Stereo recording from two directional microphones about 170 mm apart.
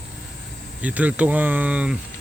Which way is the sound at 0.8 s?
10° right (ahead or behind).